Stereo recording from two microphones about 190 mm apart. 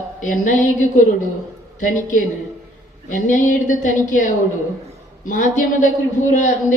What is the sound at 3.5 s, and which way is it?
A woman's voice, 40° left (ahead or behind).